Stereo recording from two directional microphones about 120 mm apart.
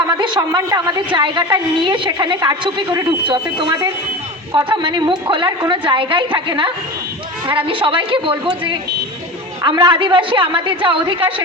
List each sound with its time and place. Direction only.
0.2 s a woman's voice: 40° right (ahead or behind)